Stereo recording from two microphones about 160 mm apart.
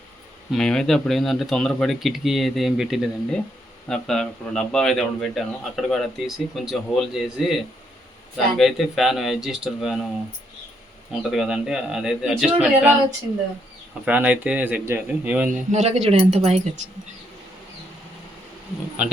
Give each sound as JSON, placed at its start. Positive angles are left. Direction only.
{"t": 0.5, "sound": "a man's voice", "side_deg": 5}
{"t": 11.1, "sound": "a man's voice", "side_deg": 0}
{"t": 14.0, "sound": "speech", "side_deg": -10}
{"t": 15.4, "sound": "speech", "side_deg": -50}